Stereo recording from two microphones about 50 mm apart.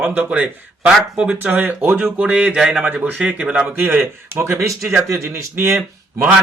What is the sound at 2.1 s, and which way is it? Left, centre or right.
Speech, right.